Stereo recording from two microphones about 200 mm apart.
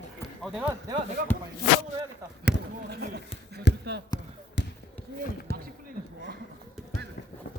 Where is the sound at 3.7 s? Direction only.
60° left (ahead or behind).